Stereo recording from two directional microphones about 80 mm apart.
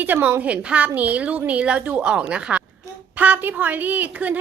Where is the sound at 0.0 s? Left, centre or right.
Right.